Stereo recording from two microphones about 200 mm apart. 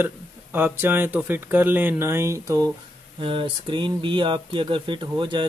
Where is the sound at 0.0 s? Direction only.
10° right (ahead or behind).